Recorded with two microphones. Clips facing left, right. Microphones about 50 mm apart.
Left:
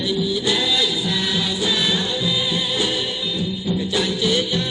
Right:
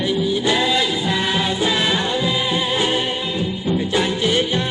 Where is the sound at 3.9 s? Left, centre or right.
Right.